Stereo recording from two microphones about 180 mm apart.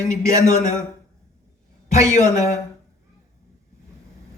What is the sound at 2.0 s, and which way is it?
Speech, 15° right (ahead or behind).